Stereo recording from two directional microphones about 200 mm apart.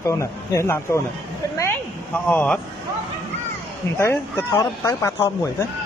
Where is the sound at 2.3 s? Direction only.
5° left (ahead or behind).